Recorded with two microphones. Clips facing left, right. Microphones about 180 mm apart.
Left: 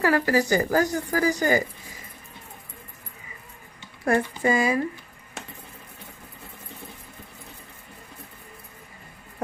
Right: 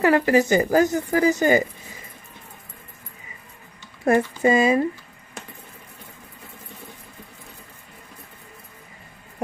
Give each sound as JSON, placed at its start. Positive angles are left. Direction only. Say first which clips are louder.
{"t": 0.0, "sound": "speech", "louder": "right 4 dB", "side_deg": -20}
{"t": 4.0, "sound": "speech", "louder": "right 4 dB", "side_deg": -20}